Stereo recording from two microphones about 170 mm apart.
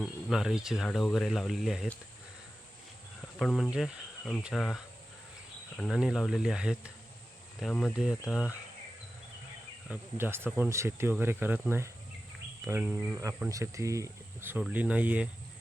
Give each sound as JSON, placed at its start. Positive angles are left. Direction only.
{"t": 0.0, "sound": "speech", "side_deg": 0}
{"t": 3.2, "sound": "speech", "side_deg": 0}
{"t": 9.9, "sound": "speech", "side_deg": -10}